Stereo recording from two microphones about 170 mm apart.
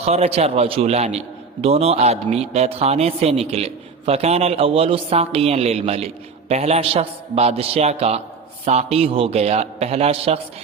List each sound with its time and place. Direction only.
0.0 s a man's voice: 35° right (ahead or behind)